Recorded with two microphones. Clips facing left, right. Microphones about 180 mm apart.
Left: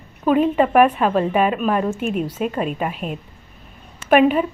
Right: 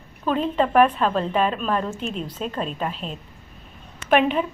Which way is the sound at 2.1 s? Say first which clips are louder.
Left 7 dB; 55° left (ahead or behind).